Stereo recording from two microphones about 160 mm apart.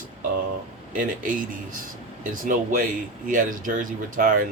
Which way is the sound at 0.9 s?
60° right (ahead or behind).